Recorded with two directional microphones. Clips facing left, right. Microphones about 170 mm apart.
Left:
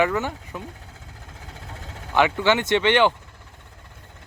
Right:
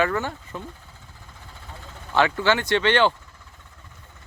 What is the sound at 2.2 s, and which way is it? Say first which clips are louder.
Speech: left 1 dB; 15° left (ahead or behind).